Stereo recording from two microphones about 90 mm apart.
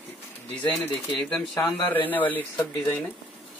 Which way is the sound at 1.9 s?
20° left (ahead or behind).